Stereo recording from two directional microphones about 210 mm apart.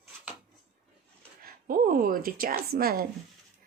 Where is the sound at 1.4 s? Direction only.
40° right (ahead or behind).